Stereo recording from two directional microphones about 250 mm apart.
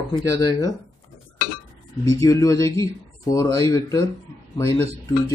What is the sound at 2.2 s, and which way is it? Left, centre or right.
A man's voice, centre.